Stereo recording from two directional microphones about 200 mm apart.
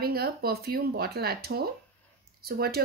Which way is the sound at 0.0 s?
50° right (ahead or behind).